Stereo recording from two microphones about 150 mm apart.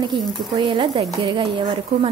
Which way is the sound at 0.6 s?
35° right (ahead or behind).